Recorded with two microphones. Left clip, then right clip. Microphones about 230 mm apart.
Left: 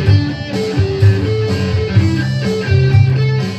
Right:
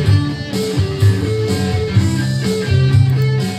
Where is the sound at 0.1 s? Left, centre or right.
Right.